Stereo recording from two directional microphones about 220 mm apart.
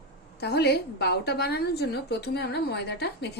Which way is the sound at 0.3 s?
45° left (ahead or behind).